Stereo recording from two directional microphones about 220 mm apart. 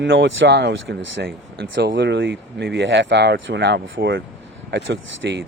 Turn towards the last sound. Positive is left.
turn(degrees=-55)  # may be behind; listen again after turning